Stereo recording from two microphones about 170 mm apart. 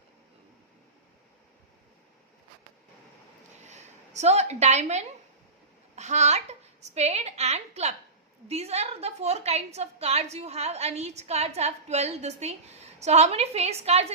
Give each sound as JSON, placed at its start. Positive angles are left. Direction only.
{"t": 3.7, "sound": "a woman's voice", "side_deg": -40}